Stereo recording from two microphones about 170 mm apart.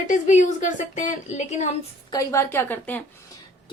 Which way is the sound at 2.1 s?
20° left (ahead or behind).